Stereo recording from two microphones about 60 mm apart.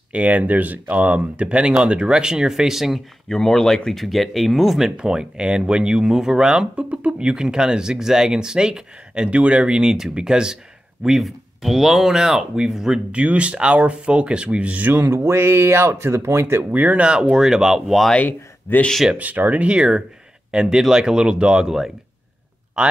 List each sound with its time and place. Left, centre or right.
0.1 s speech: right; by 3.0 s centre
3.3 s speech: centre
13.1 s speech: right
15.2 s speech: right
16.7 s speech: right
17.0 s speech: centre
18.1 s speech: left
19.1 s speech: right; by 21.9 s centre
22.8 s speech: centre